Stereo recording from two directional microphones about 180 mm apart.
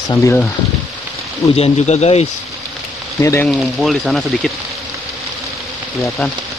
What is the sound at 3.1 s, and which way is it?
Speech, 15° left (ahead or behind).